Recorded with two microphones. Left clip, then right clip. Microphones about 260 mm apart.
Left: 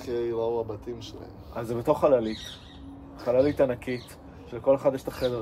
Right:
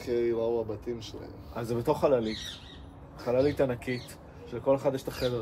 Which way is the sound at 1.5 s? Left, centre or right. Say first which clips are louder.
Left 3 dB; left.